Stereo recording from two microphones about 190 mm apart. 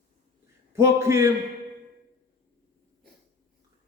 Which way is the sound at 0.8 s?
15° right (ahead or behind).